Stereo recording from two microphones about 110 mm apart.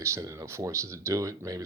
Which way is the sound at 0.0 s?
30° right (ahead or behind).